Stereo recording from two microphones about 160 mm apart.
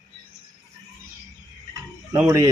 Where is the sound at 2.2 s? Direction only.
20° right (ahead or behind).